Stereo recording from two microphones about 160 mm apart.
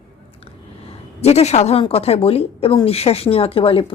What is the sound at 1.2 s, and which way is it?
A woman's voice, 40° left (ahead or behind).